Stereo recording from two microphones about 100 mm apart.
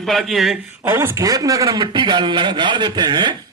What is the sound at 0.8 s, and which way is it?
A man's voice, 25° right (ahead or behind).